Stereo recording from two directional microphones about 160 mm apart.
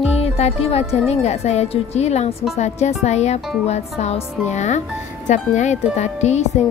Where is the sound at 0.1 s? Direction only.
40° left (ahead or behind).